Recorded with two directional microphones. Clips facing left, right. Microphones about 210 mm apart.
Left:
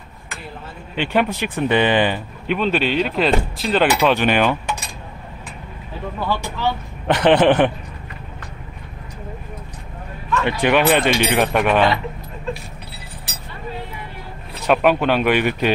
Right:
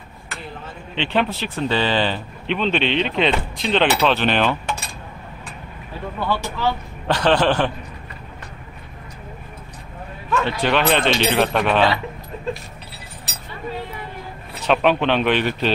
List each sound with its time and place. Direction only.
0.9 s speech: 10° left (ahead or behind)
6.2 s speech: 20° left (ahead or behind)
10.4 s speech: 15° left (ahead or behind)
14.6 s speech: 10° left (ahead or behind)